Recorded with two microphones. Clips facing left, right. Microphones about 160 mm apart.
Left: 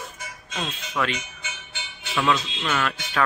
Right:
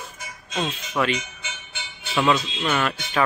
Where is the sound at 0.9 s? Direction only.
5° right (ahead or behind).